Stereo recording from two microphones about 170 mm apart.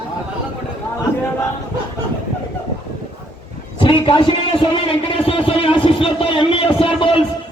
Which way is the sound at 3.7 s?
30° left (ahead or behind).